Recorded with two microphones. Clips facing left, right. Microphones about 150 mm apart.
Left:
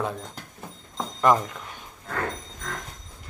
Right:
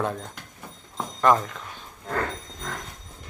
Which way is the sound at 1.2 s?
10° left (ahead or behind).